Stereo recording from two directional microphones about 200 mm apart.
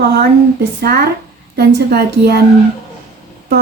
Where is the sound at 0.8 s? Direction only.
50° right (ahead or behind).